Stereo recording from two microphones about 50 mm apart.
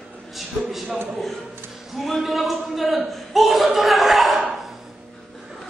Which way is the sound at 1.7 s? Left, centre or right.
Centre.